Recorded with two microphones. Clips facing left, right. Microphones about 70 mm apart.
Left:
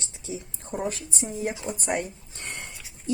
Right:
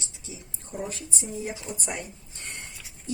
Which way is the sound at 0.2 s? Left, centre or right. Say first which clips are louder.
Left 8 dB; left.